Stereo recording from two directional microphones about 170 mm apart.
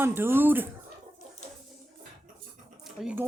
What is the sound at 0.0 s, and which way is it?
Speech, 15° right (ahead or behind).